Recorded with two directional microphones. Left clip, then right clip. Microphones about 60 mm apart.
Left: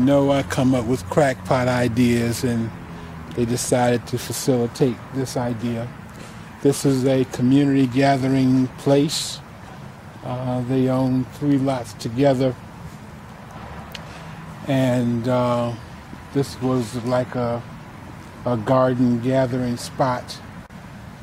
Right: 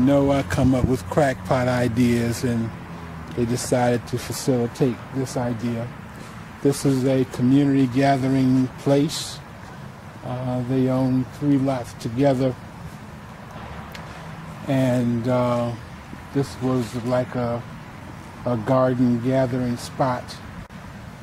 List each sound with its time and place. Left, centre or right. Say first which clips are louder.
0.0 s speech: left 1 dB; left
10.2 s speech: left 2 dB; left
14.7 s speech: left 1 dB; left